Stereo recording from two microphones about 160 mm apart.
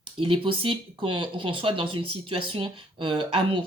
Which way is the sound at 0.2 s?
35° right (ahead or behind).